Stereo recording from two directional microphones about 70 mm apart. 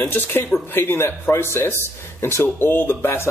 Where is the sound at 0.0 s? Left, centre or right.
Left.